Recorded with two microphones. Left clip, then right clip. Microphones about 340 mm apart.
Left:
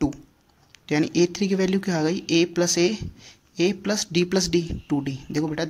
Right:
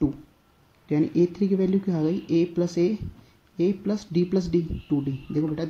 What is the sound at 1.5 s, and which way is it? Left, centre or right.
Speech, left.